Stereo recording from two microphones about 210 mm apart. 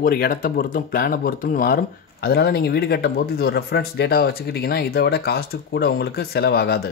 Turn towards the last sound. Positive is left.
turn(degrees=45)  # may be behind; listen again after turning